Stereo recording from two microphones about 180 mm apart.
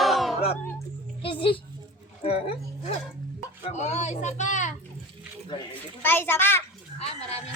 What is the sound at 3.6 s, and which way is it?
A child's voice, 40° left (ahead or behind).